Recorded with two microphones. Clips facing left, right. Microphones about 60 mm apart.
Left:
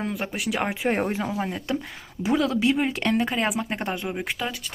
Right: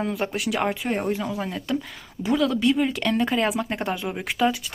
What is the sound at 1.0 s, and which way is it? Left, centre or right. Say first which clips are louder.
Speech: right 1 dB; left.